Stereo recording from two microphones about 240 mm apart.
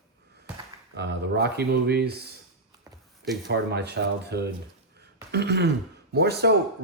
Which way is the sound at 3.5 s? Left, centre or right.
Right.